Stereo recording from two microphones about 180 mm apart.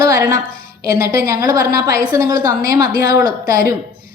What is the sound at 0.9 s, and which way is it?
A woman's voice, 15° right (ahead or behind).